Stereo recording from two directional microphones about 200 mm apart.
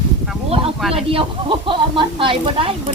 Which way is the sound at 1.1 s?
25° right (ahead or behind).